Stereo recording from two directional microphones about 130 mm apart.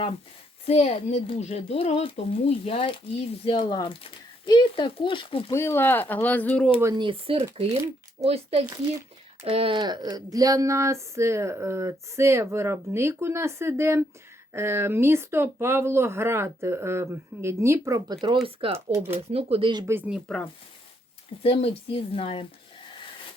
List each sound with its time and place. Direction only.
0.6 s speech: 50° left (ahead or behind)
5.5 s speech: 20° left (ahead or behind)
6.9 s speech: 40° right (ahead or behind)
9.7 s speech: 35° right (ahead or behind)
18.4 s speech: 45° right (ahead or behind)
18.9 s speech: 15° right (ahead or behind)
19.3 s speech: 50° right (ahead or behind)
20.1 s speech: 5° right (ahead or behind)
21.4 s speech: 50° left (ahead or behind)